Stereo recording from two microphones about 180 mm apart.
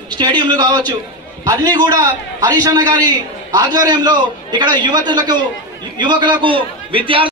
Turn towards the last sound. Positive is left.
turn(degrees=-30)  # may be behind; listen again after turning